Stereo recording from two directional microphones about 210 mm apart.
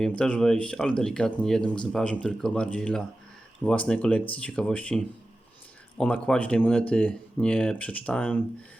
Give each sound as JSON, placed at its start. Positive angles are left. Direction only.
{"t": 0.0, "sound": "speech", "side_deg": 5}
{"t": 6.2, "sound": "speech", "side_deg": 5}